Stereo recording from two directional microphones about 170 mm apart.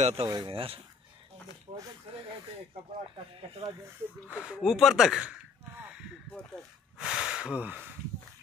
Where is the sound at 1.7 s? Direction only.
35° right (ahead or behind).